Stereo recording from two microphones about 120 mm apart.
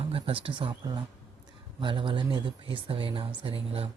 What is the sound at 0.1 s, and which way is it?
Speech, 50° right (ahead or behind).